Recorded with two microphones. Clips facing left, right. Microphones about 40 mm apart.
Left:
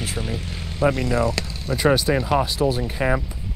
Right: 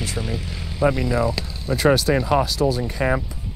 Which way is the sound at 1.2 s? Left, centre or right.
Left.